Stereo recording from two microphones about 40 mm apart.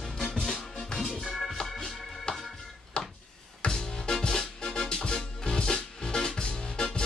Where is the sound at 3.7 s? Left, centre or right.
Centre.